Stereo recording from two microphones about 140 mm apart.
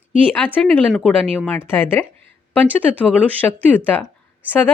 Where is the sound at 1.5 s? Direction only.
15° left (ahead or behind).